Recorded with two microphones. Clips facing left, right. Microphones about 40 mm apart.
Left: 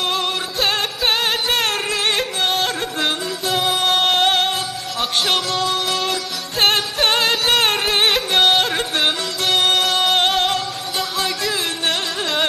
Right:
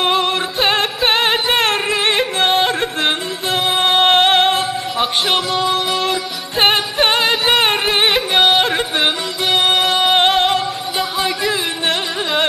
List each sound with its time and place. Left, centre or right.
0.0 s music: right